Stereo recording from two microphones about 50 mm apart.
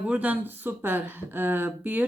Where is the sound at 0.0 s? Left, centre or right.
Right.